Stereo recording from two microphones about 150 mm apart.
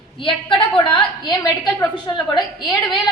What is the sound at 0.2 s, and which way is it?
A woman's voice, 35° left (ahead or behind).